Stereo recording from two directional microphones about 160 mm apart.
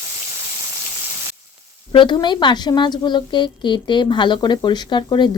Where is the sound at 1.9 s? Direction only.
30° left (ahead or behind).